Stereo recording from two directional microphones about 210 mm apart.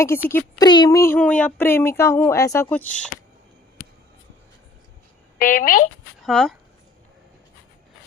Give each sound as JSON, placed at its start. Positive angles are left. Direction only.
{"t": 0.0, "sound": "speech", "side_deg": 10}
{"t": 5.4, "sound": "speech", "side_deg": 40}
{"t": 6.2, "sound": "speech", "side_deg": 0}